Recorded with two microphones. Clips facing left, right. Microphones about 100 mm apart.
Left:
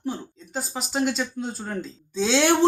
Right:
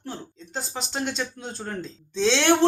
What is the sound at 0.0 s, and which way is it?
Speech, 10° left (ahead or behind).